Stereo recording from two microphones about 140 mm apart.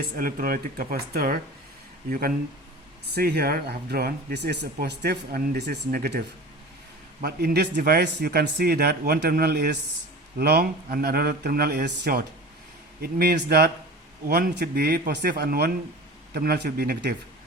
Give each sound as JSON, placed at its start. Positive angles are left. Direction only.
{"t": 0.2, "sound": "speech", "side_deg": -90}
{"t": 5.9, "sound": "speech", "side_deg": -90}